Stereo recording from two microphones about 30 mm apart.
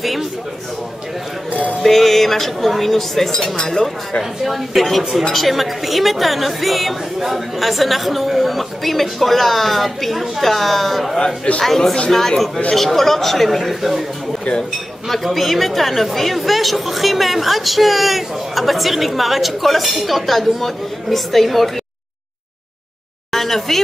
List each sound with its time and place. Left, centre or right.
0.0 s a sound: centre
1.8 s speech: centre
3.5 s speech: centre
4.2 s speech: centre
15.0 s speech: centre
23.3 s speech: centre